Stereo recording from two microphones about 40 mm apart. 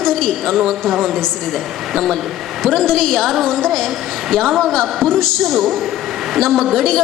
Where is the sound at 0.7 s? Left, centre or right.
Centre.